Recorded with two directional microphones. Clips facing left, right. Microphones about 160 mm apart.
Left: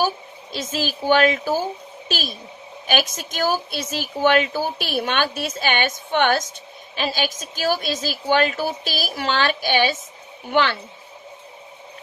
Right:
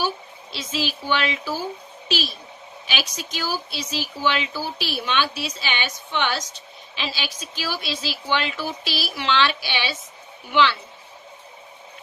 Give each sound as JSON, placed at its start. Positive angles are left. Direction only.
{"t": 0.0, "sound": "a woman's voice", "side_deg": 45}